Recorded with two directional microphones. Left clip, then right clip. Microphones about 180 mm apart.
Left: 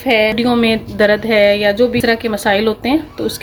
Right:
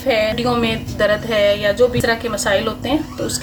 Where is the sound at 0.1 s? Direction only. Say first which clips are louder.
Left 4 dB; 50° left (ahead or behind).